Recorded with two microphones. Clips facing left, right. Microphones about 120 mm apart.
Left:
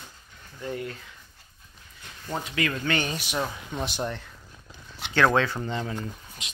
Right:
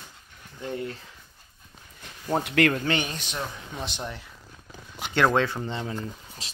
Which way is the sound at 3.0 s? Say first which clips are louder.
Left 4 dB; 10° left (ahead or behind).